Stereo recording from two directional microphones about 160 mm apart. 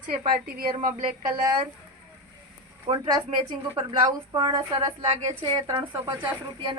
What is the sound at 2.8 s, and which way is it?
Speech, 30° right (ahead or behind).